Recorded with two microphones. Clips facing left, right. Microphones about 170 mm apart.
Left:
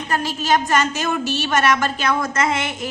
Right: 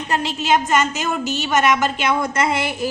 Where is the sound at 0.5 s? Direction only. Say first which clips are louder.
Right 1 dB; 10° right (ahead or behind).